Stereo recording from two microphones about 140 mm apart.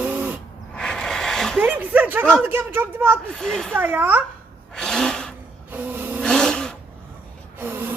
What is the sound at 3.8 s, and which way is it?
Speech, 15° right (ahead or behind).